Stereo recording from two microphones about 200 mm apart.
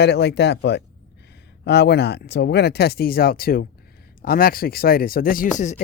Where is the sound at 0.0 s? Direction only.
55° left (ahead or behind).